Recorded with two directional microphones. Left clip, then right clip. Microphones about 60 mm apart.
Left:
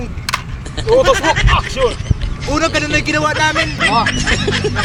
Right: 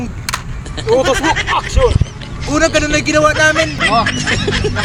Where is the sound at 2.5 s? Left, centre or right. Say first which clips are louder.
Right 2 dB; right.